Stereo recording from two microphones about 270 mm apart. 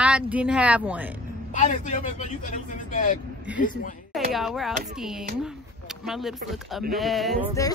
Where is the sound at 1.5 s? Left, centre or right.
Left.